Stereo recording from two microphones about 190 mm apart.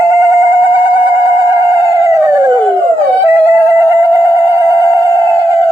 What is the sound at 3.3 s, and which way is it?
Music, 10° right (ahead or behind).